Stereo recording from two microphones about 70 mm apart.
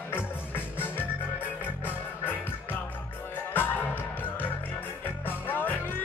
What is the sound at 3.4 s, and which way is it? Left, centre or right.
Music, left.